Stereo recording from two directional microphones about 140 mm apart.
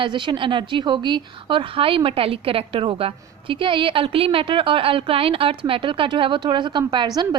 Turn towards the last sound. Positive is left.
turn(degrees=-35)  # may be behind; listen again after turning